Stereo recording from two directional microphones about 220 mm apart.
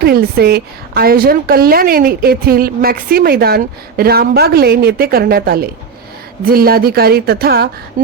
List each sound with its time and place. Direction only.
0.0 s a woman's voice: 45° right (ahead or behind)